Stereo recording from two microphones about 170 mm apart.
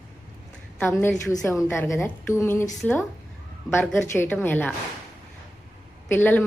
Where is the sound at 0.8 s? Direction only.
15° left (ahead or behind).